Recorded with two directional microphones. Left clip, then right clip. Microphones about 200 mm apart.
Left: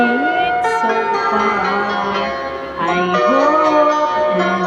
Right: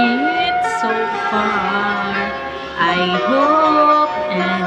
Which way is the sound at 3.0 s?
35° left (ahead or behind).